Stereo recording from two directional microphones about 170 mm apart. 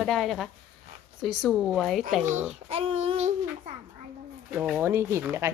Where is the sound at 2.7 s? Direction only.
35° right (ahead or behind).